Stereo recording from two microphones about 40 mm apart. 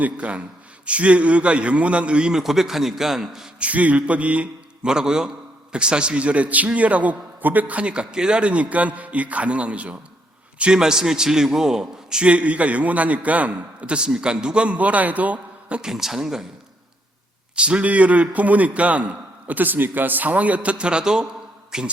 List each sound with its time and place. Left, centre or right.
0.0 s a man's voice: right
2.3 s a man's voice: centre
3.6 s a man's voice: right
4.8 s a man's voice: centre; by 10.0 s right
10.6 s a man's voice: centre
12.2 s a man's voice: right
15.8 s a man's voice: centre
17.5 s a man's voice: right